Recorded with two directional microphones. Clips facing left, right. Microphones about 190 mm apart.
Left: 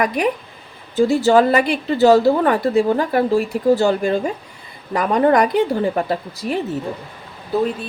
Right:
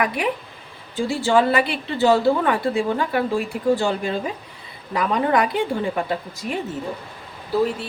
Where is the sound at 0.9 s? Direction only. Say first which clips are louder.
Left 6 dB; 40° left (ahead or behind).